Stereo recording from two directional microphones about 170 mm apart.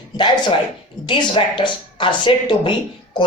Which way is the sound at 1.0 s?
30° left (ahead or behind).